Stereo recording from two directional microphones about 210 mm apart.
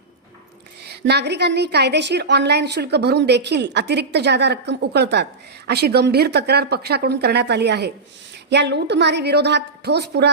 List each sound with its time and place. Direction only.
0.9 s a woman's voice: 50° right (ahead or behind)